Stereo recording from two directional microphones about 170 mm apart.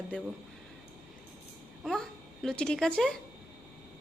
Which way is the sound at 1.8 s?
5° left (ahead or behind).